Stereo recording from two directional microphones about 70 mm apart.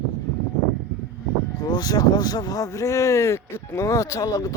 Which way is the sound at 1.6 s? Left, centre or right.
Left.